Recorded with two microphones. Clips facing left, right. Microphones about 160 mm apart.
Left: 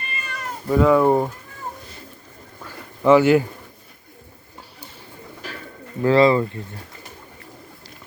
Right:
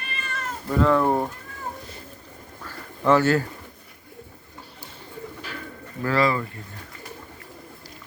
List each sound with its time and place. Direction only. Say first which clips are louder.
0.1 s cat: even; 5° left (ahead or behind)
2.6 s a sound: left 5 dB; 15° left (ahead or behind)
6.0 s speech: left 7 dB; 25° left (ahead or behind)